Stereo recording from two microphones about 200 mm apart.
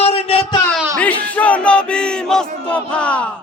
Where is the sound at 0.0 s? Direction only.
30° left (ahead or behind).